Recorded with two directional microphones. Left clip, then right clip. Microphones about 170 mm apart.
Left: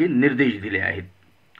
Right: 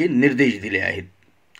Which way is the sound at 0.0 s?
40° right (ahead or behind).